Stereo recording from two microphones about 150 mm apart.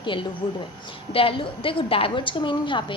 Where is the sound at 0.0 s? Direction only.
35° left (ahead or behind).